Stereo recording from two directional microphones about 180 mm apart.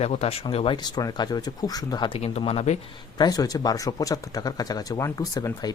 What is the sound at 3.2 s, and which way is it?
Speech, 20° left (ahead or behind).